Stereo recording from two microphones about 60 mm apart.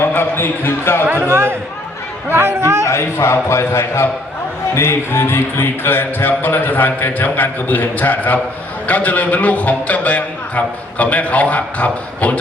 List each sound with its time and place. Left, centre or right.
0.0 s speech: left
1.3 s speech: right
2.8 s a man's voice: left